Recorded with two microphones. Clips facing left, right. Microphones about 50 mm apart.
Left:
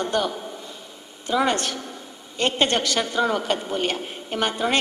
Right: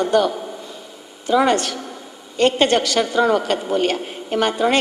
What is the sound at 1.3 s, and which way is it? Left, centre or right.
Speech, right.